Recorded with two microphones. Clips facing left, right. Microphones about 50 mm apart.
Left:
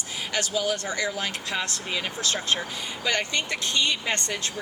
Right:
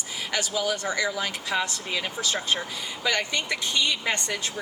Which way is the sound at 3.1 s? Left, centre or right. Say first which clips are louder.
Even; left.